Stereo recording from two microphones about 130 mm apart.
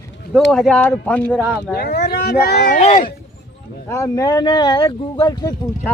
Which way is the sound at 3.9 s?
25° left (ahead or behind).